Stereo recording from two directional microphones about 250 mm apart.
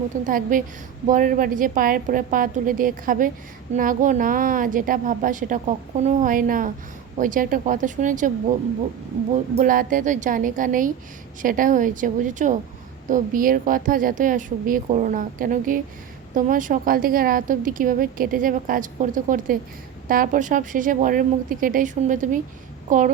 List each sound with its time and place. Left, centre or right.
0.3 s a woman's voice: right
9.6 s a woman's voice: right